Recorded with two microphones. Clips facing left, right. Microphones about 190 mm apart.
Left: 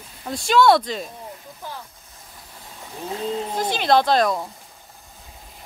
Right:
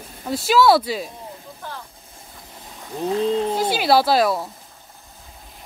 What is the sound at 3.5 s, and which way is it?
Speech, 10° right (ahead or behind).